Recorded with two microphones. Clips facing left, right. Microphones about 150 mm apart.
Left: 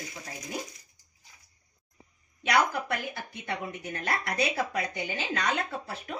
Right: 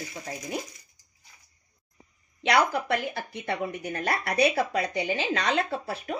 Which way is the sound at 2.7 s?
65° right (ahead or behind).